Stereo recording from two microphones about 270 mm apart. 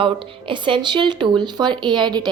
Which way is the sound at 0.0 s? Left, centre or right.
Centre.